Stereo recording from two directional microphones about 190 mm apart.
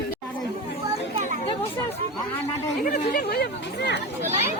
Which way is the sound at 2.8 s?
40° left (ahead or behind).